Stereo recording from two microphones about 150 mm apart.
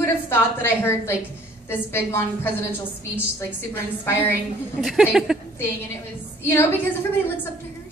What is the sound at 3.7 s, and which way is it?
Speech, 15° left (ahead or behind).